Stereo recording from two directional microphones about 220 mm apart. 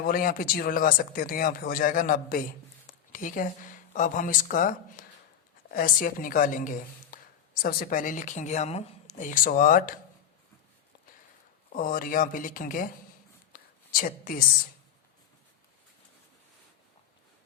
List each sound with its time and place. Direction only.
0.0 s speech: 40° left (ahead or behind)
11.7 s speech: 40° left (ahead or behind)
13.5 s a sound: 40° left (ahead or behind)